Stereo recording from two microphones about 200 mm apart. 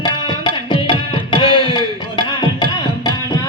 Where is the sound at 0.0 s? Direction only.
25° left (ahead or behind).